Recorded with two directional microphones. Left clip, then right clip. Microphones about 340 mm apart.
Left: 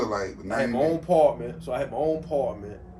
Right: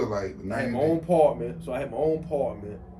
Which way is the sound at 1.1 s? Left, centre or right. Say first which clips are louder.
Left 1 dB; centre.